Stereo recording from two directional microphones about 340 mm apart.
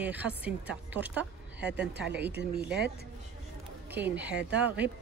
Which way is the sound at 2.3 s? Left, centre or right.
Right.